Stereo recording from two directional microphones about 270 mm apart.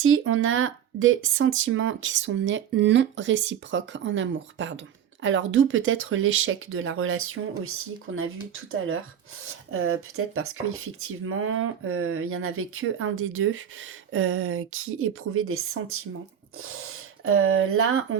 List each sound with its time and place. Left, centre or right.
0.0 s speech: right